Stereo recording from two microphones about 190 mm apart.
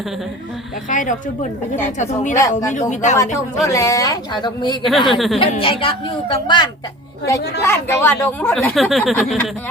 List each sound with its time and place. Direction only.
0.9 s a woman's voice: 40° left (ahead or behind)
2.4 s speech: 20° left (ahead or behind)
2.7 s a woman's voice: 40° left (ahead or behind)
3.2 s speech: 15° left (ahead or behind)
5.1 s speech: centre (ahead or behind)
5.4 s speech: 30° left (ahead or behind)
7.6 s speech: 10° left (ahead or behind)